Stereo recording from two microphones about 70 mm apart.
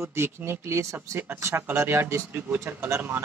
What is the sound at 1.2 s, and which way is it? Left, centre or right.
Speech, right.